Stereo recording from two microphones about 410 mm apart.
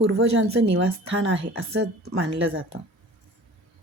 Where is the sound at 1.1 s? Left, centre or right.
Right.